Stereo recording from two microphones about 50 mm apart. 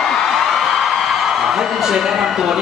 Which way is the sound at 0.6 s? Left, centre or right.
Centre.